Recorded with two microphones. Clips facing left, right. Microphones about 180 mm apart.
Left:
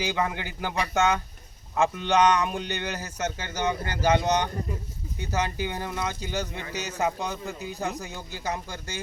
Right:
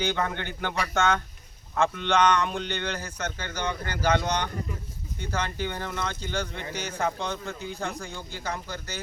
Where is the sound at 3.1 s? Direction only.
20° left (ahead or behind); by 7.8 s 5° left (ahead or behind).